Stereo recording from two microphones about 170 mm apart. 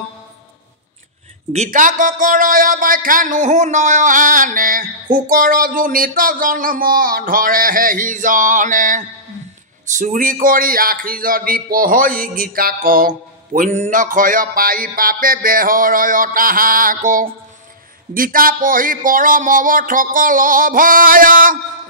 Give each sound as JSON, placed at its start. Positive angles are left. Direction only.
{"t": 1.5, "sound": "a man's voice", "side_deg": -50}